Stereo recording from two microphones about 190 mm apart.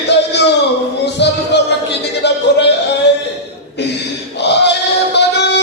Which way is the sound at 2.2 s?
60° left (ahead or behind).